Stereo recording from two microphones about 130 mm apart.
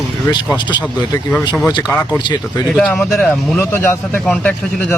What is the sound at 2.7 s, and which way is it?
Speech, 5° left (ahead or behind).